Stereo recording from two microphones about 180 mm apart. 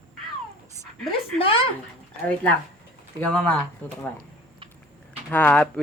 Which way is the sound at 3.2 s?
5° left (ahead or behind).